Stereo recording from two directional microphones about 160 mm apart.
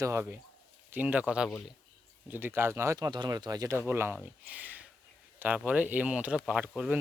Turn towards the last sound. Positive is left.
turn(degrees=-5)  # may be behind; listen again after turning